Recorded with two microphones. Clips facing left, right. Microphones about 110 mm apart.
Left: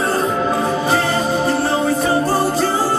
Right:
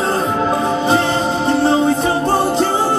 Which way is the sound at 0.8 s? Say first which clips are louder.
Right 2 dB; 25° right (ahead or behind).